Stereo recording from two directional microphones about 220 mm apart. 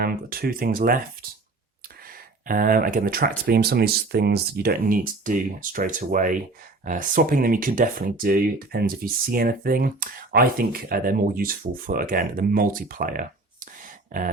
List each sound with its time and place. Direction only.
0.0 s speech: 40° right (ahead or behind)
2.5 s speech: 40° right (ahead or behind)